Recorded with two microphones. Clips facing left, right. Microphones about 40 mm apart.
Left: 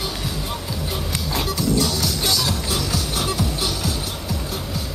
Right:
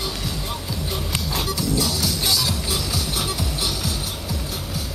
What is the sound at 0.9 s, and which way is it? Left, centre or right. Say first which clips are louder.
Music: even; centre.